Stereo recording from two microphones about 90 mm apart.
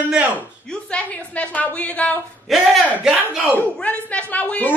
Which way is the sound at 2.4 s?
5° right (ahead or behind).